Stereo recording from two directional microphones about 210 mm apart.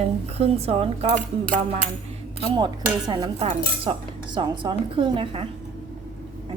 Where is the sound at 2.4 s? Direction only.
20° right (ahead or behind).